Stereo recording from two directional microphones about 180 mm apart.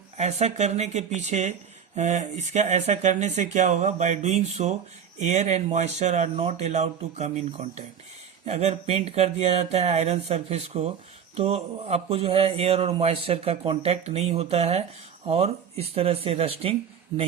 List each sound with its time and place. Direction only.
0.2 s a man's voice: 40° right (ahead or behind)